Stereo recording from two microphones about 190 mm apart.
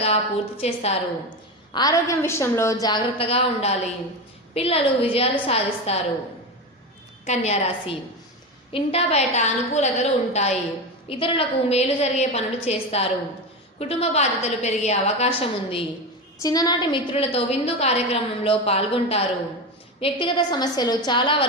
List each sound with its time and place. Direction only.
0.0 s a woman's voice: 30° left (ahead or behind)
1.7 s a woman's voice: 20° left (ahead or behind)
7.3 s a woman's voice: 35° left (ahead or behind)